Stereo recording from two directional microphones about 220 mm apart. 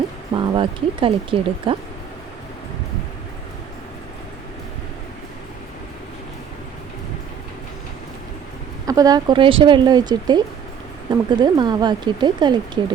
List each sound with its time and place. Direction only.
0.3 s speech: 20° right (ahead or behind)
8.9 s speech: 15° right (ahead or behind)